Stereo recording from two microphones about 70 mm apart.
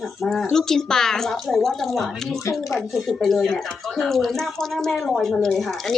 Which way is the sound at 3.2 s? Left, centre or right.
Centre.